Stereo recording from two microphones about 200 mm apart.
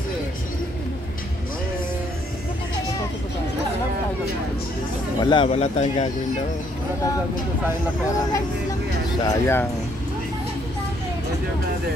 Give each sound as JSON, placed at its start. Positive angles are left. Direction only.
{"t": 5.2, "sound": "speech", "side_deg": 25}
{"t": 9.2, "sound": "speech", "side_deg": 10}